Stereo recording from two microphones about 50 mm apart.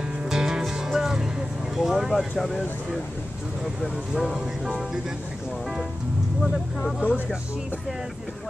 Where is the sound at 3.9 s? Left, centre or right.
Centre.